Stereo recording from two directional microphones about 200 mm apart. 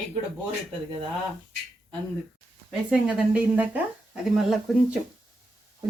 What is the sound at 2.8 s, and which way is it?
Speech, 5° right (ahead or behind).